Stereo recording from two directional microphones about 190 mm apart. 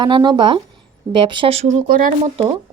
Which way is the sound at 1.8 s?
45° right (ahead or behind).